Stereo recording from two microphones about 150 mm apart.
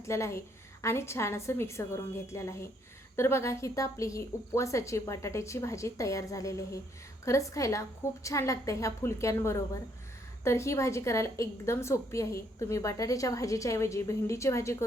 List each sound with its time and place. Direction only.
0.0 s a woman's voice: 20° left (ahead or behind)